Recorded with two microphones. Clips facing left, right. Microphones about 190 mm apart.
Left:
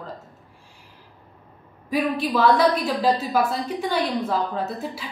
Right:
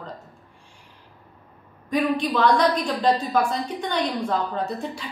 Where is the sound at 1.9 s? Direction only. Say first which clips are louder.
Right 1 dB; 5° left (ahead or behind).